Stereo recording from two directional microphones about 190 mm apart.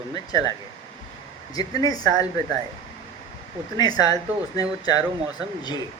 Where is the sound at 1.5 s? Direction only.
20° left (ahead or behind).